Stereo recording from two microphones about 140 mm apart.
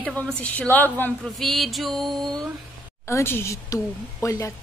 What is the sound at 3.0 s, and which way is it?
A woman's voice, 20° left (ahead or behind).